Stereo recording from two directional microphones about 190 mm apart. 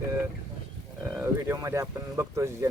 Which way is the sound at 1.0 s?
15° right (ahead or behind).